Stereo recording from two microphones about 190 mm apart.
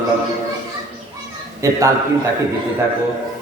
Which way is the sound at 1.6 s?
15° right (ahead or behind).